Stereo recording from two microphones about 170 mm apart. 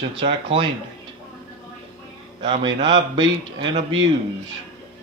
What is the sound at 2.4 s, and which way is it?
Speech, 30° right (ahead or behind).